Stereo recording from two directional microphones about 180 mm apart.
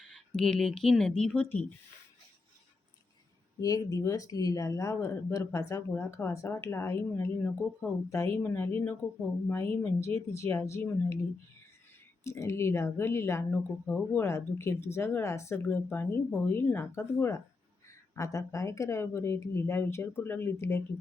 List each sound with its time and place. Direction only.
0.3 s speech: centre (ahead or behind)
3.6 s speech: 20° left (ahead or behind)
12.2 s speech: 15° left (ahead or behind)